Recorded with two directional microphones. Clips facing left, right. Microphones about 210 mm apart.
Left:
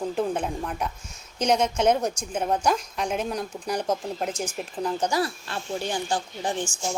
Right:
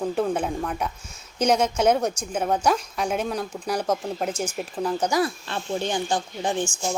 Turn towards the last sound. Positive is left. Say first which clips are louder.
# right 3 dB
turn(degrees=-20)  # may be behind; listen again after turning